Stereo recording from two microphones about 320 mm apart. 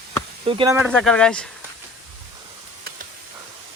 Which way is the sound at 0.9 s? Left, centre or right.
Centre.